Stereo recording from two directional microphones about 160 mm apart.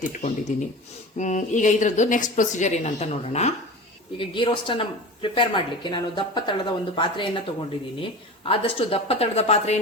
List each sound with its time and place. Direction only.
0.0 s speech: 50° left (ahead or behind)
4.2 s speech: 30° left (ahead or behind)